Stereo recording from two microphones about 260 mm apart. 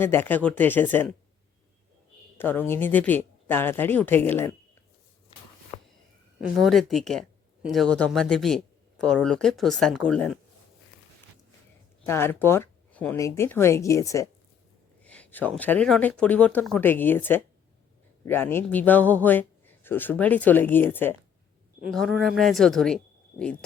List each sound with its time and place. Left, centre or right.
0.0 s a man's voice: centre
2.4 s a man's voice: centre
5.7 s a sound: left
6.6 s speech: centre
12.0 s a man's voice: centre